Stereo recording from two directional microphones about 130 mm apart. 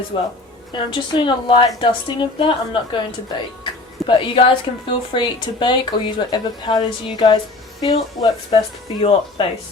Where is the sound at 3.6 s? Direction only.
40° left (ahead or behind).